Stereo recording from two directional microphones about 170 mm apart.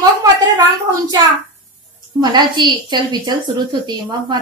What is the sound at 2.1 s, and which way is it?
A woman's voice, 25° right (ahead or behind).